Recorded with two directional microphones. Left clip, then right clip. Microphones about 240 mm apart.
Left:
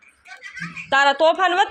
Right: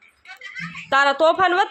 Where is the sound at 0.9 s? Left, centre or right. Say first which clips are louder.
Even; centre.